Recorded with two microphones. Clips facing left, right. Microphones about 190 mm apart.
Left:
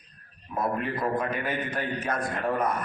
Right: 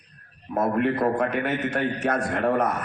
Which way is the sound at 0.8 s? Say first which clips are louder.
Right 6 dB; 65° right (ahead or behind).